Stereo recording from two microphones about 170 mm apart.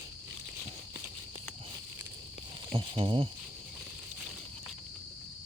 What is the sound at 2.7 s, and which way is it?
Speech, 35° right (ahead or behind).